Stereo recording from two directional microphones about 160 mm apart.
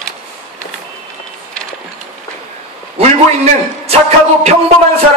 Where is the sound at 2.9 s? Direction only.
40° right (ahead or behind).